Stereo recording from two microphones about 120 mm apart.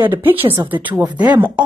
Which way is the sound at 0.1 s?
15° right (ahead or behind).